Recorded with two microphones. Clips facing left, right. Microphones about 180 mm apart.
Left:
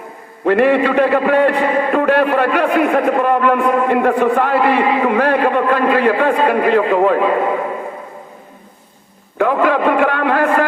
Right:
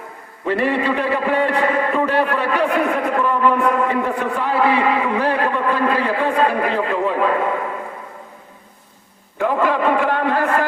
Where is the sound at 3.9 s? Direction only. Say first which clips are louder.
Left 7 dB; 65° left (ahead or behind).